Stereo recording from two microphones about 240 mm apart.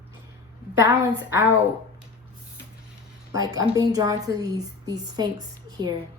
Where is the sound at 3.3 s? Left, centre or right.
Centre.